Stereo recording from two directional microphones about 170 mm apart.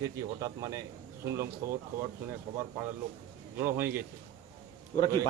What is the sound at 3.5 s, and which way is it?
Speech, 15° right (ahead or behind).